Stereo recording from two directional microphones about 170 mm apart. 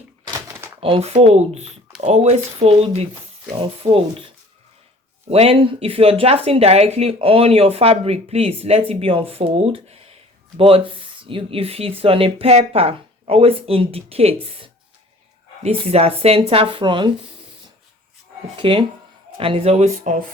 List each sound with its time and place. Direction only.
0.3 s a sound: 20° right (ahead or behind)
0.8 s speech: 35° right (ahead or behind)
5.3 s speech: 35° right (ahead or behind)
15.6 s speech: 35° right (ahead or behind)
18.5 s speech: 30° right (ahead or behind)